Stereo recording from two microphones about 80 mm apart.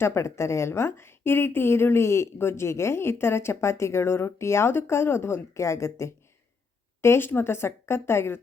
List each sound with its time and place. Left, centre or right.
0.0 s a woman's voice: left